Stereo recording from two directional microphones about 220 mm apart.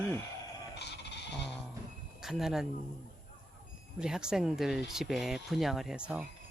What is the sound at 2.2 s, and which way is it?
Speech, centre (ahead or behind).